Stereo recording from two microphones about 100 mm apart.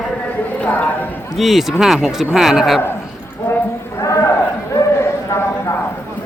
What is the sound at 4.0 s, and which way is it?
Chatter, 30° left (ahead or behind).